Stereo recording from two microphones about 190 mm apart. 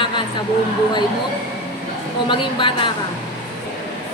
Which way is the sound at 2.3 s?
25° left (ahead or behind).